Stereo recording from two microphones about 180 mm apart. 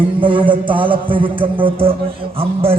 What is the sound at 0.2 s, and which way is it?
A man's voice, 30° right (ahead or behind).